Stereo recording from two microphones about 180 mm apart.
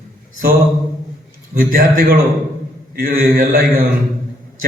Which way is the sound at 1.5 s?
55° right (ahead or behind).